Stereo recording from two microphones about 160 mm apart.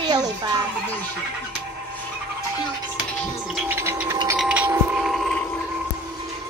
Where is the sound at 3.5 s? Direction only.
15° right (ahead or behind).